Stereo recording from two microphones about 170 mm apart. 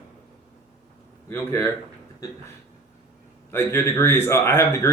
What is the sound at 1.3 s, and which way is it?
Speech, 15° left (ahead or behind).